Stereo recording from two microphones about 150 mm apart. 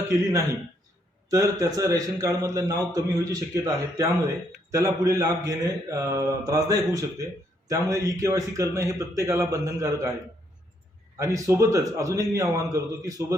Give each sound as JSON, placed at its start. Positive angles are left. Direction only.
{"t": 1.3, "sound": "a man's voice", "side_deg": -25}
{"t": 11.2, "sound": "a man's voice", "side_deg": -20}